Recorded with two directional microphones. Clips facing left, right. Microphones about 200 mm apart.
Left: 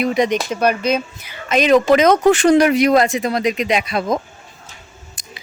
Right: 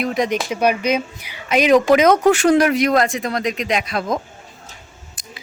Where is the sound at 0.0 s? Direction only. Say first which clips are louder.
Left 3 dB; centre (ahead or behind).